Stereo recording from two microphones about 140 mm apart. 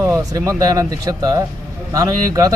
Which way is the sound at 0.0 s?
25° right (ahead or behind).